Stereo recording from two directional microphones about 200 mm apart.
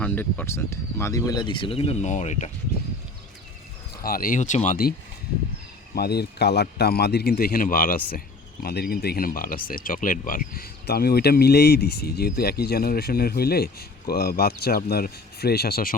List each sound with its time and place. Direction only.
0.0 s speech: 10° left (ahead or behind); by 2.5 s 35° left (ahead or behind)
3.9 s speech: 45° left (ahead or behind)